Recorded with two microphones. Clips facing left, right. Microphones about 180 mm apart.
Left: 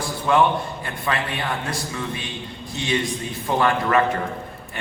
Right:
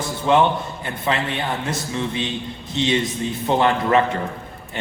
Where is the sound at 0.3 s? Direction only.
25° right (ahead or behind).